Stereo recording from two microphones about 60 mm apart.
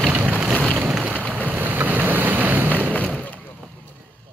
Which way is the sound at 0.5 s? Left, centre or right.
Centre.